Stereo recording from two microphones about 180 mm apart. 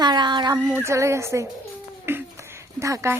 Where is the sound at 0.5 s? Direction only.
10° right (ahead or behind).